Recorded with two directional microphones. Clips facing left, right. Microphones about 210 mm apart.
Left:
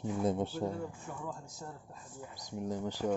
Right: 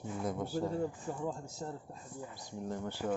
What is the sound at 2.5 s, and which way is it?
Speech, 15° left (ahead or behind).